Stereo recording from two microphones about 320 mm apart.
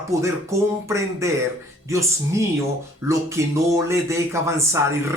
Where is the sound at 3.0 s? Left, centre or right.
Centre.